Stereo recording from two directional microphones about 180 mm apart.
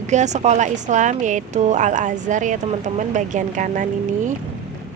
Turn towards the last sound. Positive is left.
turn(degrees=-45)  # may be behind; listen again after turning